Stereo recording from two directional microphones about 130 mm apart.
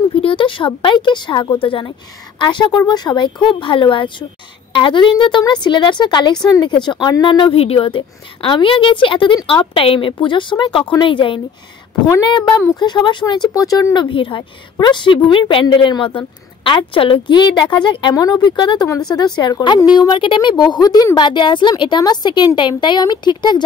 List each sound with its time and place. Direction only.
0.1 s a woman's voice: 45° left (ahead or behind); by 14.0 s 25° left (ahead or behind)
14.0 s a woman's voice: 40° left (ahead or behind)